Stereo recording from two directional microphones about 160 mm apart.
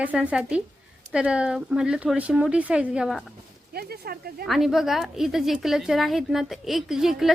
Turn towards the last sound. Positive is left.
turn(degrees=0)  # may be behind; listen again after turning